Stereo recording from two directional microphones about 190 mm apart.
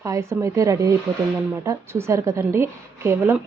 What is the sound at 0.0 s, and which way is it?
A woman's voice, 15° right (ahead or behind).